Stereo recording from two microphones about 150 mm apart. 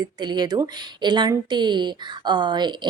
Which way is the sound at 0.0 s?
30° right (ahead or behind).